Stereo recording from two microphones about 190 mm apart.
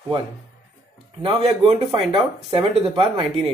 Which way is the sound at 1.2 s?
25° right (ahead or behind).